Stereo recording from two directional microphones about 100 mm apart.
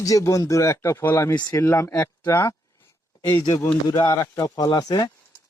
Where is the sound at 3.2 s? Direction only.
45° left (ahead or behind).